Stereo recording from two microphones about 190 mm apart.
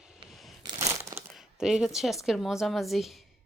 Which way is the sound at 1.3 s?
Centre (ahead or behind).